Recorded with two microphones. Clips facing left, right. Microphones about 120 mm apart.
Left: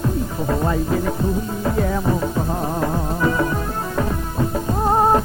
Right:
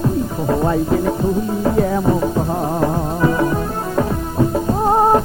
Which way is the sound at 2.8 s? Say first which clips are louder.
Right 4 dB; 25° right (ahead or behind).